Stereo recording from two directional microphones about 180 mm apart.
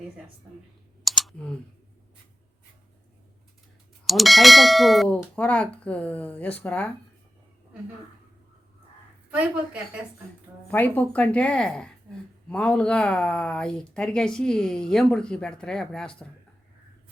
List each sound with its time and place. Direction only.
1.0 s clicking: centre (ahead or behind)
4.0 s speech: centre (ahead or behind)
9.3 s a woman's voice: 10° right (ahead or behind)
10.7 s speech: 10° left (ahead or behind)